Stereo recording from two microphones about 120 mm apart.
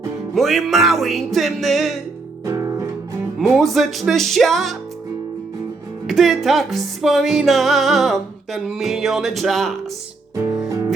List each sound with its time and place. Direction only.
0.3 s music: centre (ahead or behind)
2.5 s music: 25° right (ahead or behind)
3.3 s music: centre (ahead or behind)
6.1 s music: centre (ahead or behind)